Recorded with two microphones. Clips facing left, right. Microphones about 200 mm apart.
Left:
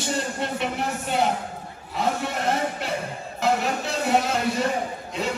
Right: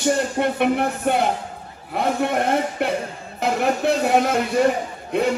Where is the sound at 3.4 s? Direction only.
55° right (ahead or behind).